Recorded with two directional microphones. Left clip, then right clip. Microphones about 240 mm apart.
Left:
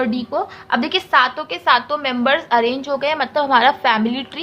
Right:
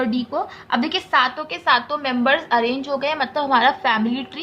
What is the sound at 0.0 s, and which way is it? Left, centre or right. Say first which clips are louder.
A woman's voice: left 2 dB; centre.